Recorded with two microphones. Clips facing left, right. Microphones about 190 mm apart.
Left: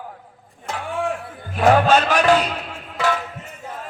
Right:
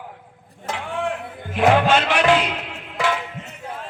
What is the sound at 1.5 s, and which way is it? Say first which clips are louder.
A man's voice: left 1 dB; 40° left (ahead or behind).